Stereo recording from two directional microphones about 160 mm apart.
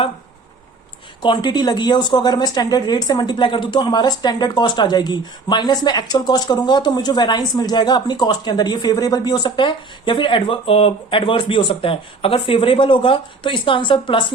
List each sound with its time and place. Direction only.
1.2 s speech: 30° left (ahead or behind)